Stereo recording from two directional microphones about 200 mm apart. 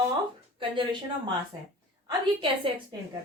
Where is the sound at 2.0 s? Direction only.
25° right (ahead or behind).